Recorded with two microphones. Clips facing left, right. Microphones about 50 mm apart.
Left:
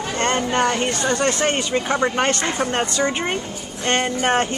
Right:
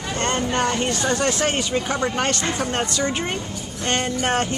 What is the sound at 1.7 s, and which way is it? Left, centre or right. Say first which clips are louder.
Speech: left 3 dB; centre.